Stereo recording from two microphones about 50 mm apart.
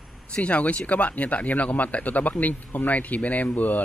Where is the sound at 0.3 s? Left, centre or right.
Left.